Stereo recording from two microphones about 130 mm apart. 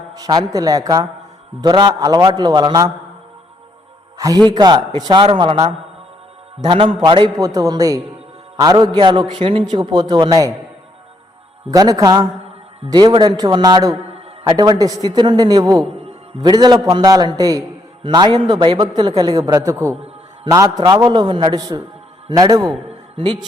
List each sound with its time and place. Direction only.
0.1 s a man's voice: 30° right (ahead or behind)
4.4 s a man's voice: 35° right (ahead or behind)
11.7 s a man's voice: 30° right (ahead or behind)